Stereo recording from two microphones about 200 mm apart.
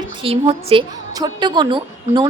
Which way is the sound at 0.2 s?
30° right (ahead or behind).